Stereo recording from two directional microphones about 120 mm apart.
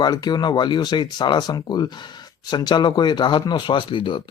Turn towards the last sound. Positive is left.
turn(degrees=40)  # may be behind; listen again after turning